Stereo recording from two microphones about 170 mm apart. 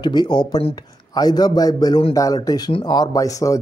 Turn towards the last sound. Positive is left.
turn(degrees=20)  # may be behind; listen again after turning